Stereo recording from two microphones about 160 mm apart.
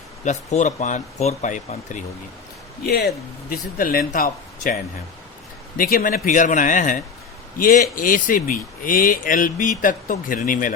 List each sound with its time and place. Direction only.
0.3 s speech: 50° left (ahead or behind)
2.8 s speech: 70° left (ahead or behind)